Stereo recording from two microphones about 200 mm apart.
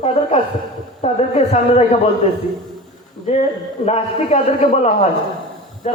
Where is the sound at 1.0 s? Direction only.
30° left (ahead or behind).